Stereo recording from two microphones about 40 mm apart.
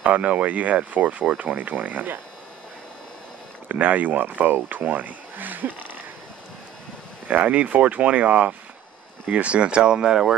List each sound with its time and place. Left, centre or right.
0.0 s speech: right
3.6 s speech: right
7.2 s speech: right; by 10.3 s centre